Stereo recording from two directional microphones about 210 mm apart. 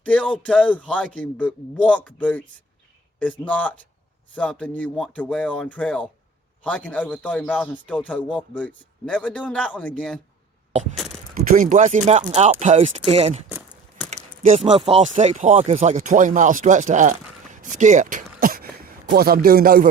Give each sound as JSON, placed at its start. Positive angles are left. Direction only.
{"t": 0.0, "sound": "a man's voice", "side_deg": 5}
{"t": 11.4, "sound": "speech", "side_deg": -40}
{"t": 14.4, "sound": "speech", "side_deg": -30}